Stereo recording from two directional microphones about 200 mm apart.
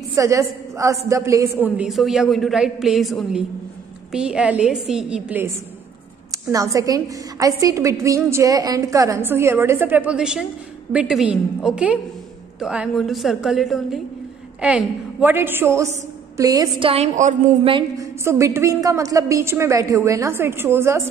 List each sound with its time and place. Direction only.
0.1 s a woman's voice: 15° right (ahead or behind)
16.9 s speech: 35° right (ahead or behind)
17.7 s a woman's voice: 15° right (ahead or behind)